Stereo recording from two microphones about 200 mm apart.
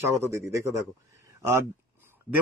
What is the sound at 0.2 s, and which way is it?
Speech, 15° right (ahead or behind).